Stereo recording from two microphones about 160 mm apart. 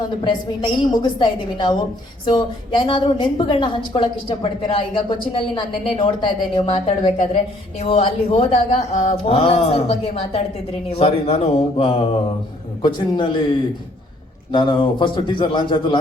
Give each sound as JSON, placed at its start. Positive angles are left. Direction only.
{"t": 0.3, "sound": "a woman's voice", "side_deg": 30}
{"t": 14.5, "sound": "a woman's voice", "side_deg": 30}